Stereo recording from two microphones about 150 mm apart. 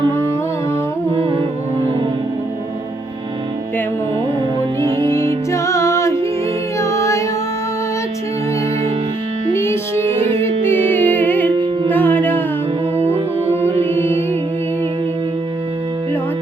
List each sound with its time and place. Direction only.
5.0 s music: 20° left (ahead or behind)
9.6 s music: 15° left (ahead or behind)
13.0 s music: 40° right (ahead or behind)
13.9 s music: 15° left (ahead or behind)